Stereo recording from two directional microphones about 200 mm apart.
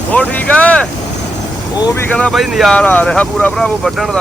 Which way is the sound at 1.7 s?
20° left (ahead or behind).